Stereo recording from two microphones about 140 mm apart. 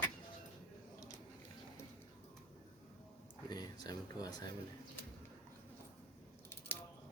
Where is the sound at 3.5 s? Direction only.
30° left (ahead or behind).